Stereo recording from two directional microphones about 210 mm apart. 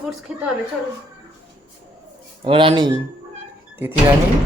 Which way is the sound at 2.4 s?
25° right (ahead or behind).